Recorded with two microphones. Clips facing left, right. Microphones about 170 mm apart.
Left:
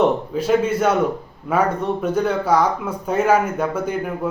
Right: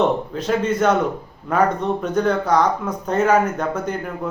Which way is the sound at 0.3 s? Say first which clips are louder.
Left 2 dB; 10° left (ahead or behind).